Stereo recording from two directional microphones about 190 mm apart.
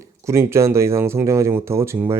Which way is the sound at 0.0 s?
15° right (ahead or behind).